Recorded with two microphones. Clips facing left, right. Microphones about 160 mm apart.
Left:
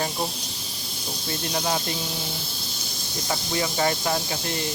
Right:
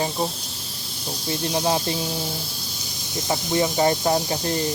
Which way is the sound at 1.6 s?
30° right (ahead or behind).